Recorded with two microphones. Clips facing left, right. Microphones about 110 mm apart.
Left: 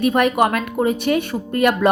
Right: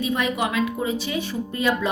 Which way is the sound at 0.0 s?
60° left (ahead or behind).